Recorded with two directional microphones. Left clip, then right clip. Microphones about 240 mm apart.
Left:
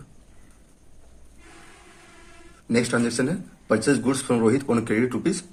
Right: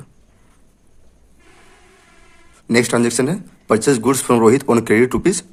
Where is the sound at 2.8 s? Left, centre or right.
Right.